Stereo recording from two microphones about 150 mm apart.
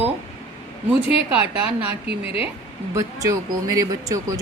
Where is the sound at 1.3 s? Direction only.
10° right (ahead or behind).